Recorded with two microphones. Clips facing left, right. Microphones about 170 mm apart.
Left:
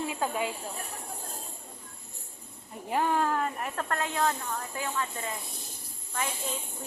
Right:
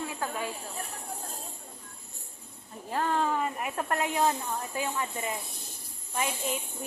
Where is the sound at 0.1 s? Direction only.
20° left (ahead or behind).